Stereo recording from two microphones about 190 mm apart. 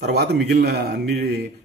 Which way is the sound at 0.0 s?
60° right (ahead or behind).